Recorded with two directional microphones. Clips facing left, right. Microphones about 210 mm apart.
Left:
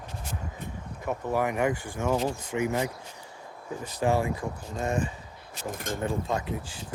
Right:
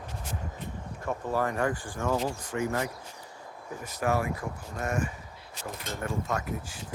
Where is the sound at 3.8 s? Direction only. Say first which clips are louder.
Left 3 dB; 30° left (ahead or behind).